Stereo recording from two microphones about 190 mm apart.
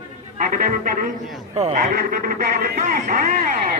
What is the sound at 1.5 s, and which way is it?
Speech, 35° right (ahead or behind).